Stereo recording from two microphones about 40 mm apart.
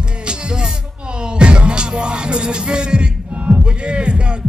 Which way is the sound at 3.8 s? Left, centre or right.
Right.